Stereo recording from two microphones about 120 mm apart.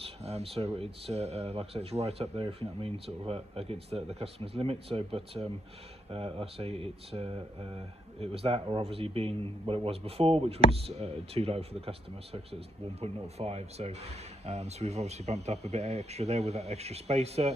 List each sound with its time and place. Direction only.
0.0 s speech: 60° right (ahead or behind)